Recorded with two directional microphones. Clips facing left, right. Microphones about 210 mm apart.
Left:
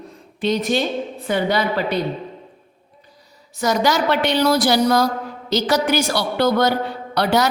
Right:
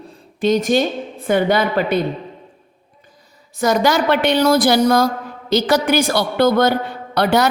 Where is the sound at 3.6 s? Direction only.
55° right (ahead or behind).